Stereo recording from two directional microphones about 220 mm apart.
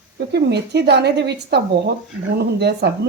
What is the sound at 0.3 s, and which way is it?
Speech, 50° right (ahead or behind).